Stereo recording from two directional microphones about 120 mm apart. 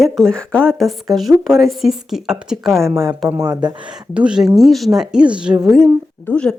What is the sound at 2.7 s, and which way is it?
Speech, 25° right (ahead or behind).